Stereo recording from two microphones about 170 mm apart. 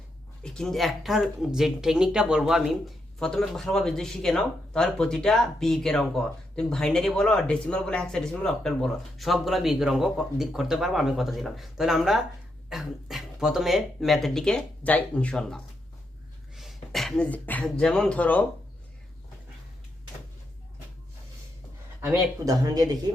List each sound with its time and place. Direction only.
0.4 s speech: 5° left (ahead or behind)
22.0 s speech: 20° right (ahead or behind)